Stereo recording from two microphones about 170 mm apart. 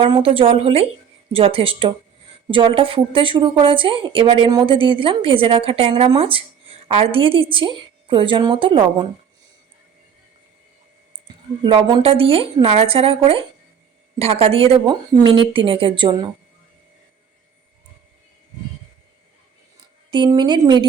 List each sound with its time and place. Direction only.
0.0 s a woman's voice: 30° right (ahead or behind)
11.6 s a woman's voice: 30° right (ahead or behind)
20.1 s a woman's voice: 25° right (ahead or behind)